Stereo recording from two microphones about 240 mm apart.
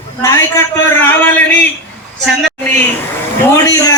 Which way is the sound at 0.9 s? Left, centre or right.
Centre.